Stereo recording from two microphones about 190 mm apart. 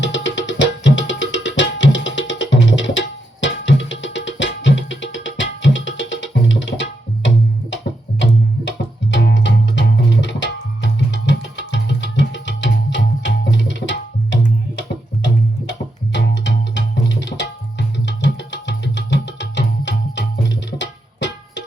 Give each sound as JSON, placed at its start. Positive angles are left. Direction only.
{"t": 0.0, "sound": "music", "side_deg": 70}
{"t": 16.1, "sound": "tabla", "side_deg": 70}